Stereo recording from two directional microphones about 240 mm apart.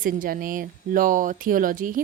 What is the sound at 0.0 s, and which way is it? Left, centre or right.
Speech, right.